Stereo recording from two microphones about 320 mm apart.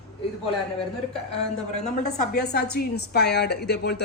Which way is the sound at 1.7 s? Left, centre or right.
Left.